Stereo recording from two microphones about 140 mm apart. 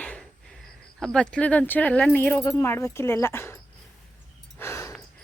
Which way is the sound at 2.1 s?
15° left (ahead or behind).